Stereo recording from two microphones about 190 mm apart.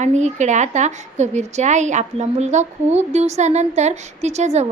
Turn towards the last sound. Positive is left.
turn(degrees=-35)  # may be behind; listen again after turning